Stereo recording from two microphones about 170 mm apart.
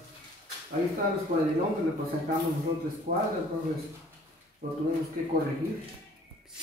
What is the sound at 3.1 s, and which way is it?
Speech, 50° right (ahead or behind).